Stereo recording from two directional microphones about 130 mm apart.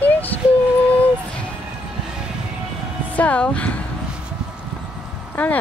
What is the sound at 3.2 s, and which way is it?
Speech, 10° left (ahead or behind).